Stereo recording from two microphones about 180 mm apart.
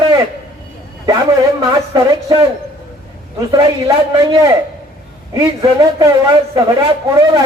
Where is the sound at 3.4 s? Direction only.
20° right (ahead or behind).